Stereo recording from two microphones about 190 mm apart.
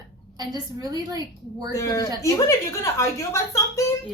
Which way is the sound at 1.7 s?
15° left (ahead or behind).